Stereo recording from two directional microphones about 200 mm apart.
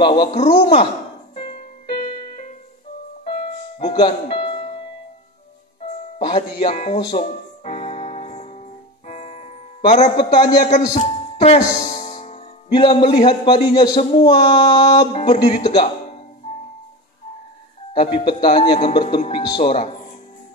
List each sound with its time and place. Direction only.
0.0 s speech: 25° left (ahead or behind)
1.3 s music: 30° left (ahead or behind)
3.3 s music: 25° left (ahead or behind)
6.1 s music: 30° left (ahead or behind)
6.6 s speech: 35° left (ahead or behind)
7.0 s music: 25° left (ahead or behind)
9.8 s speech: 30° left (ahead or behind)
10.8 s music: 20° left (ahead or behind)
11.4 s speech: 30° left (ahead or behind)
15.0 s speech: 35° left (ahead or behind)
17.9 s speech: 25° left (ahead or behind)